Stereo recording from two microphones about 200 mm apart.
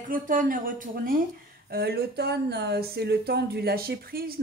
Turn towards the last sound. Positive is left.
turn(degrees=-50)  # may be behind; listen again after turning